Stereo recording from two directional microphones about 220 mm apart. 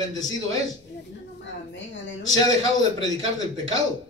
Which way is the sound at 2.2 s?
15° left (ahead or behind).